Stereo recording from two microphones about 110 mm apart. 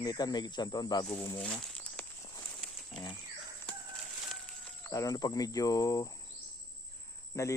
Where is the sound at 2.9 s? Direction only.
Centre (ahead or behind).